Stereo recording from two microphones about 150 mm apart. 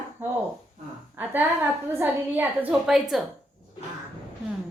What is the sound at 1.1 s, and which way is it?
A woman's voice, 15° right (ahead or behind).